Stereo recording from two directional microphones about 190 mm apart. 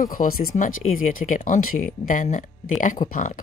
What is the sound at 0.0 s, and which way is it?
Speech, 45° left (ahead or behind).